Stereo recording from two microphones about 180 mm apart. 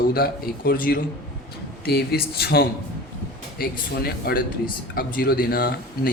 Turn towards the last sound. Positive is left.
turn(degrees=60)  # may be behind; listen again after turning